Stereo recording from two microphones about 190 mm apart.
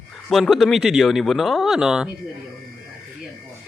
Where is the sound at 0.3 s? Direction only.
Centre (ahead or behind).